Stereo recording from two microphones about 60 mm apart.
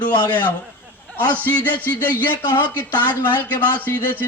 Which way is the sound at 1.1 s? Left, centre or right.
Left.